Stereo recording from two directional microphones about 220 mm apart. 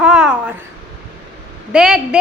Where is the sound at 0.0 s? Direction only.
5° right (ahead or behind).